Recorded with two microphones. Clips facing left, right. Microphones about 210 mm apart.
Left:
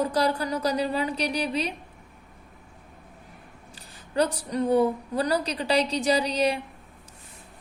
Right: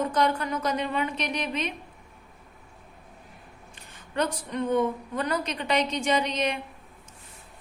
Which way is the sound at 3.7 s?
35° left (ahead or behind).